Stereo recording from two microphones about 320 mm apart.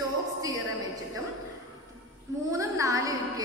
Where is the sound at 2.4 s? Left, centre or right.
Centre.